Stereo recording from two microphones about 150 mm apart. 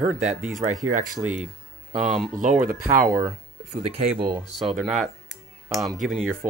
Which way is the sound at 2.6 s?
65° right (ahead or behind).